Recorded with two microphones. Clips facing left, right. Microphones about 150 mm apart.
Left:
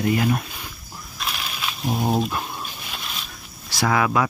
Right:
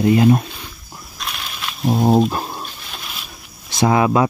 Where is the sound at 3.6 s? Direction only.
20° right (ahead or behind).